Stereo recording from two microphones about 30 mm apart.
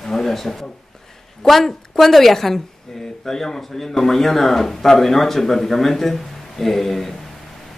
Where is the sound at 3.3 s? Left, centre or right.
Centre.